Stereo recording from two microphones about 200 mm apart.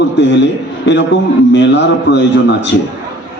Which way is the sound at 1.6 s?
60° left (ahead or behind).